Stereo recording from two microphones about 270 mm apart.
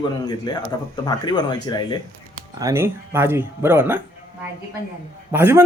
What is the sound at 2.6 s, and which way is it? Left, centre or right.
Speech, centre.